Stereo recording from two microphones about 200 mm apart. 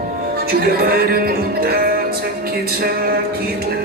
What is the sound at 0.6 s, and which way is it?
Music, 50° right (ahead or behind).